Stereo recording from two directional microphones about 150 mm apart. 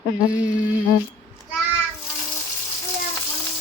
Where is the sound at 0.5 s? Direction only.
60° left (ahead or behind).